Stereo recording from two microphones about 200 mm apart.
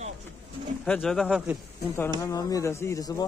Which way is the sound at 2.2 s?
15° left (ahead or behind).